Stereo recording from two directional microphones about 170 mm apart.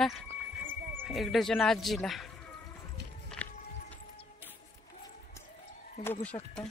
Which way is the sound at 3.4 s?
10° left (ahead or behind).